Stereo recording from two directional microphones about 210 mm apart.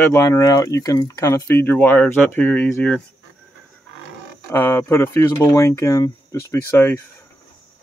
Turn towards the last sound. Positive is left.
turn(degrees=10)  # may be behind; listen again after turning